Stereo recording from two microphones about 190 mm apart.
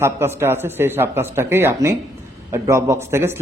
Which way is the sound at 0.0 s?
15° right (ahead or behind).